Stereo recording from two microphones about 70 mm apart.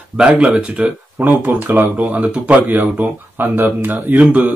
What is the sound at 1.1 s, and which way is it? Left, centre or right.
Speech, right.